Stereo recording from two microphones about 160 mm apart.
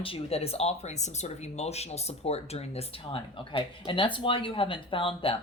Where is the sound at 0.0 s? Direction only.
35° left (ahead or behind).